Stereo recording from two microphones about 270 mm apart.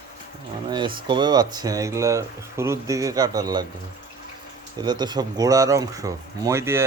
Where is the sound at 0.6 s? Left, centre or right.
Centre.